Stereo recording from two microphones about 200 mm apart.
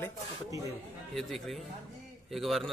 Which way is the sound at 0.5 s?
15° right (ahead or behind).